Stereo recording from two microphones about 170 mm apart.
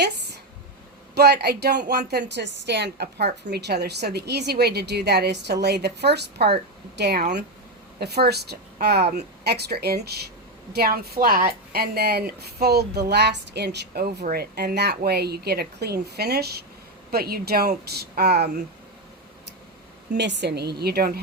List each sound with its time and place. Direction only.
1.1 s a woman's voice: 75° right (ahead or behind)
20.1 s a woman's voice: 85° right; by 21.2 s 65° right (ahead or behind)